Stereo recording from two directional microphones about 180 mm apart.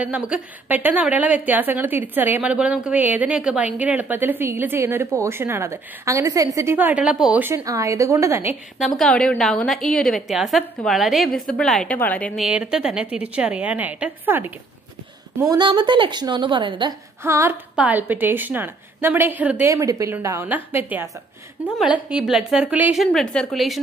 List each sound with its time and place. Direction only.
0.0 s a woman's voice: 5° right (ahead or behind)
8.8 s a woman's voice: centre (ahead or behind)
15.4 s a woman's voice: 25° right (ahead or behind)
17.2 s a woman's voice: 15° right (ahead or behind)